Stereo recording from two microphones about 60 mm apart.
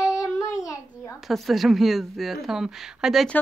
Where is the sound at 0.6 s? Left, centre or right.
Left.